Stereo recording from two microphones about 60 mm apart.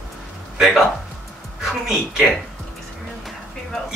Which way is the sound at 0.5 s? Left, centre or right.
Centre.